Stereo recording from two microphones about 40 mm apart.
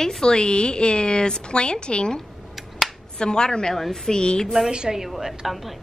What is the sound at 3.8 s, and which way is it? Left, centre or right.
Speech, centre.